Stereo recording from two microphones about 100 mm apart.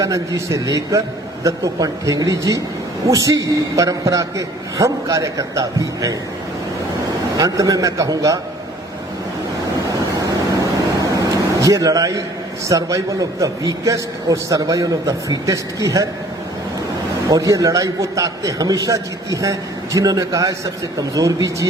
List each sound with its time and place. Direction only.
0.0 s a man's voice: 30° right (ahead or behind)
7.3 s a man's voice: 35° right (ahead or behind)
11.0 s air conditioning: 35° right (ahead or behind)
12.6 s a man's voice: 35° right (ahead or behind)
17.2 s a man's voice: 35° right (ahead or behind)